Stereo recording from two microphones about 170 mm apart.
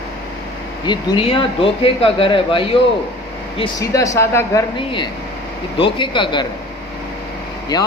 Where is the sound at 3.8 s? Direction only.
20° left (ahead or behind).